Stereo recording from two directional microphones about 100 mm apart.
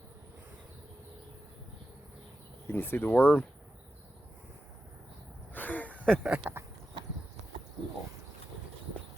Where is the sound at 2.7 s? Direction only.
20° left (ahead or behind).